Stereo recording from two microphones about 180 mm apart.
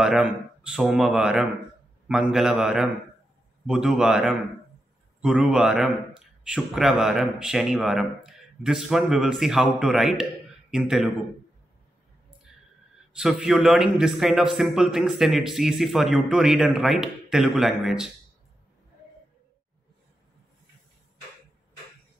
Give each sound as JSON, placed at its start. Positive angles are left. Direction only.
{"t": 0.0, "sound": "a man's voice", "side_deg": -5}
{"t": 13.1, "sound": "a man's voice", "side_deg": 0}